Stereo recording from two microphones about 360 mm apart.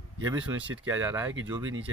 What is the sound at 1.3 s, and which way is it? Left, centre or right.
Speech, right.